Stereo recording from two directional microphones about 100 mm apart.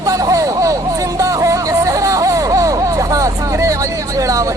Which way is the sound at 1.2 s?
35° right (ahead or behind).